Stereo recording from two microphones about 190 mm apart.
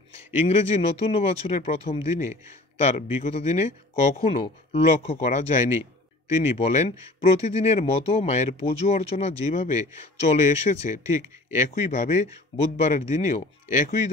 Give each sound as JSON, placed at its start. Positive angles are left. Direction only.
{"t": 0.4, "sound": "speech", "side_deg": 35}